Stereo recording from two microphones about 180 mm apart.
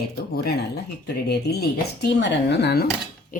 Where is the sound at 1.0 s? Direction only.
65° left (ahead or behind).